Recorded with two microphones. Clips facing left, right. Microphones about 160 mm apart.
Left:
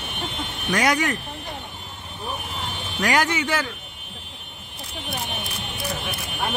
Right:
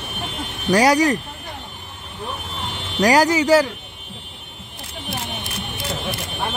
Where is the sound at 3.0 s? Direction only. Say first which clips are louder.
Right 7 dB; 35° right (ahead or behind).